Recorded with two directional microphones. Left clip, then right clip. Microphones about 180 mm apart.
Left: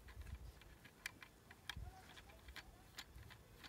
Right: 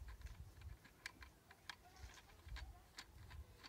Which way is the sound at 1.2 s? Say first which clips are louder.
Left 4 dB; 5° left (ahead or behind).